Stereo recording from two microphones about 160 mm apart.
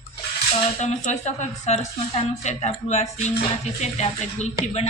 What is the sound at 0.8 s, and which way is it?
A woman's voice, 45° left (ahead or behind).